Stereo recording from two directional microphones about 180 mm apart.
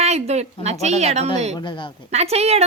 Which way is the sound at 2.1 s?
35° right (ahead or behind).